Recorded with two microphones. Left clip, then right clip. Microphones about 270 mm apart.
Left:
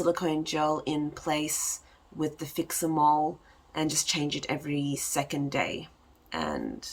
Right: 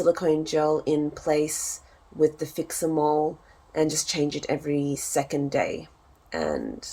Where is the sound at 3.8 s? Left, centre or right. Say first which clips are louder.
Right 4 dB; centre.